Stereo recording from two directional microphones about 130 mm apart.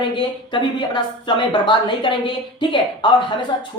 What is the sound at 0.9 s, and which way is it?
Speech, 35° left (ahead or behind).